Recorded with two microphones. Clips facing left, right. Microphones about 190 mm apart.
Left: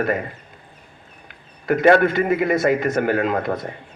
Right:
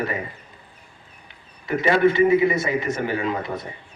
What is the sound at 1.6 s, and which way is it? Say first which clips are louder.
A man's voice: left 4 dB; 55° left (ahead or behind).